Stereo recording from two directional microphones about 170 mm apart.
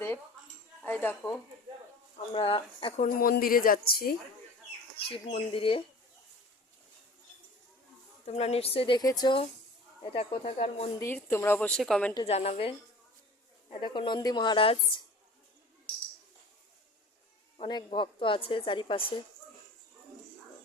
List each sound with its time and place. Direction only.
0.8 s a sound: 10° left (ahead or behind)
2.3 s speech: 30° left (ahead or behind)
3.0 s a woman's voice: 60° left (ahead or behind)
4.9 s speech: 35° left (ahead or behind)
8.2 s speech: 40° left (ahead or behind)
11.0 s a woman's voice: 15° left (ahead or behind)
12.1 s a woman's voice: 35° left (ahead or behind)
17.6 s a woman's voice: 25° left (ahead or behind)